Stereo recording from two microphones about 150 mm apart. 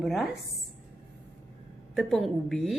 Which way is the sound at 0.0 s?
Centre (ahead or behind).